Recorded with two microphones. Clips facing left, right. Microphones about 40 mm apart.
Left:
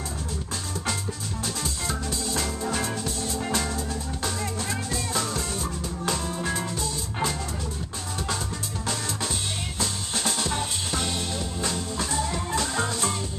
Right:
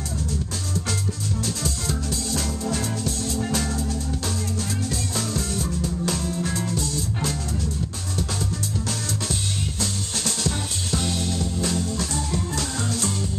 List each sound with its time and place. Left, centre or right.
1.4 s music: centre
5.1 s music: centre
9.8 s music: centre